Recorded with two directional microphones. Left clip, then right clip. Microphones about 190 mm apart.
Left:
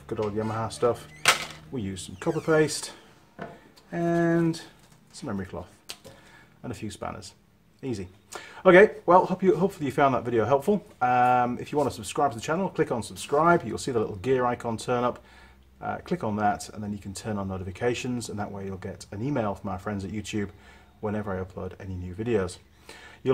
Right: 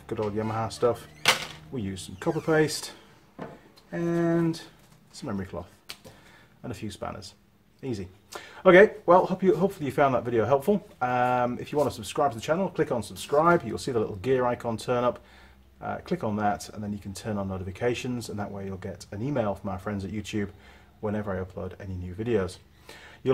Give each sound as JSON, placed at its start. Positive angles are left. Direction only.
{"t": 0.0, "sound": "speech", "side_deg": -5}
{"t": 1.2, "sound": "a sound", "side_deg": 25}
{"t": 1.7, "sound": "speech", "side_deg": 0}